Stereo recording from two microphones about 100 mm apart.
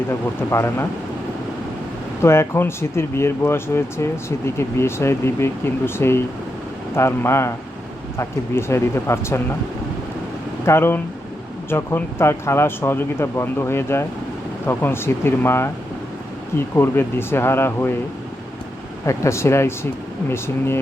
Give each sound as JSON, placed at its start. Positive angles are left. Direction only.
{"t": 0.5, "sound": "speech", "side_deg": 25}
{"t": 2.2, "sound": "speech", "side_deg": 25}
{"t": 10.7, "sound": "speech", "side_deg": 25}
{"t": 19.0, "sound": "speech", "side_deg": 30}